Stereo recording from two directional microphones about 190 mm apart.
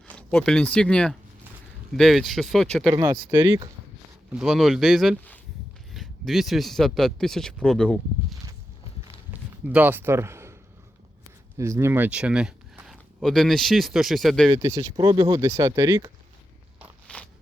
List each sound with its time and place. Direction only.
0.1 s speech: 5° left (ahead or behind)
2.9 s speech: 20° right (ahead or behind); by 8.4 s centre (ahead or behind)
9.3 s a sound: 10° right (ahead or behind)
11.5 s speech: 15° right (ahead or behind); by 14.5 s centre (ahead or behind)
14.5 s speech: 15° right (ahead or behind)
17.1 s a sound: 5° left (ahead or behind)